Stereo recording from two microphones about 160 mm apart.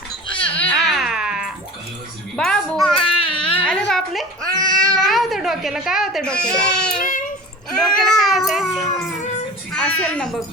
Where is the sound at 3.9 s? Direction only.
Centre (ahead or behind).